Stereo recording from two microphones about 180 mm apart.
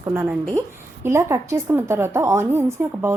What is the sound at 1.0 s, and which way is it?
A woman's voice, 15° right (ahead or behind).